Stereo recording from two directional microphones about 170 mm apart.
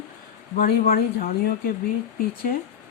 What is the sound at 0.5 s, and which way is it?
Speech, 60° left (ahead or behind).